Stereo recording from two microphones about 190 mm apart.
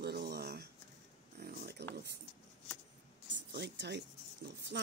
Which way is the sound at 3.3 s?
65° right (ahead or behind).